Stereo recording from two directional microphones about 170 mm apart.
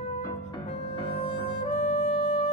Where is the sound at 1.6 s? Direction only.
40° left (ahead or behind).